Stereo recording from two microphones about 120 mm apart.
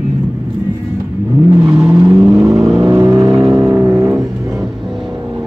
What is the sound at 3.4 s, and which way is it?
Vehicle, centre (ahead or behind).